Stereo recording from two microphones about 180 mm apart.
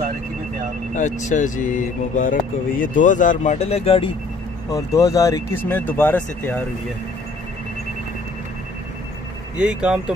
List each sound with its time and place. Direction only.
0.9 s speech: 40° left (ahead or behind)
4.6 s speech: 20° left (ahead or behind)
9.6 s speech: 5° right (ahead or behind)